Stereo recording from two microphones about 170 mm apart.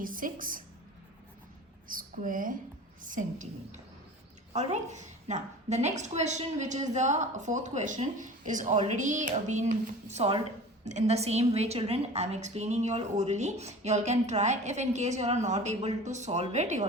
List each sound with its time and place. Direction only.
0.0 s a woman's voice: 55° right (ahead or behind)
1.9 s a sound: 55° right (ahead or behind)
4.5 s a woman's voice: 45° right (ahead or behind)